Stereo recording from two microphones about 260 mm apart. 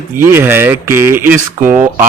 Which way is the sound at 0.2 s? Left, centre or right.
Centre.